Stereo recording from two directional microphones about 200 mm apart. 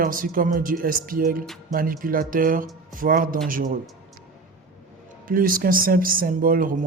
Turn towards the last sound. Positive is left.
turn(degrees=-45)  # may be behind; listen again after turning